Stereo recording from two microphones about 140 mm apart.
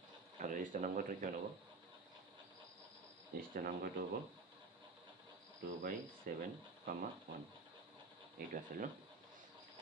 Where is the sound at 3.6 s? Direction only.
90° right.